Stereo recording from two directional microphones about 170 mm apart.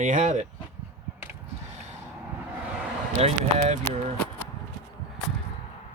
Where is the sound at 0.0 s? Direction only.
45° right (ahead or behind).